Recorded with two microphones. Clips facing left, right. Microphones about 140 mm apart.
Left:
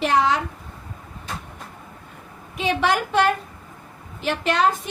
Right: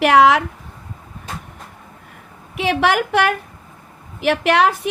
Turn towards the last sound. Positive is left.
turn(degrees=-70)  # may be behind; listen again after turning